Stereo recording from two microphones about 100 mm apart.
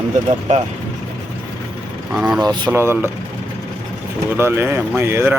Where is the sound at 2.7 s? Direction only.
25° right (ahead or behind).